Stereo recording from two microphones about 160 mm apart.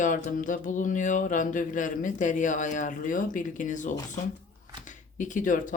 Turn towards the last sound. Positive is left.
turn(degrees=55)  # may be behind; listen again after turning